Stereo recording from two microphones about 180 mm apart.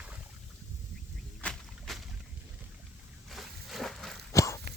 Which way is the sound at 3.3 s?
Centre (ahead or behind).